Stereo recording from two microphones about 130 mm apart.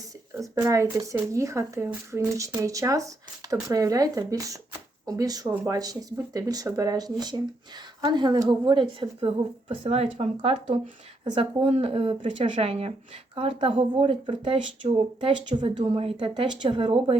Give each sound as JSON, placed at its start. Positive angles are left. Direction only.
{"t": 0.6, "sound": "a woman's voice", "side_deg": -25}